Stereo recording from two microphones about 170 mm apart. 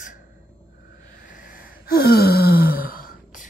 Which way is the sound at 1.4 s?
60° left (ahead or behind).